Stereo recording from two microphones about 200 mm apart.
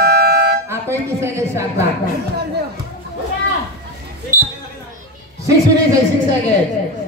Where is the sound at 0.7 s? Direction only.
15° right (ahead or behind).